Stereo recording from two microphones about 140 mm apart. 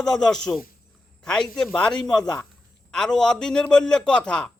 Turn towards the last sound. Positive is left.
turn(degrees=5)  # may be behind; listen again after turning